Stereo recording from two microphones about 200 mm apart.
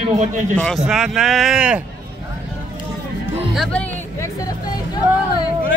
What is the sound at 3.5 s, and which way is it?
Speech, centre (ahead or behind).